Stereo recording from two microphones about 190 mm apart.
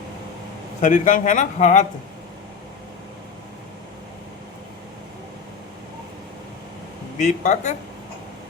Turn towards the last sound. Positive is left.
turn(degrees=40)  # may be behind; listen again after turning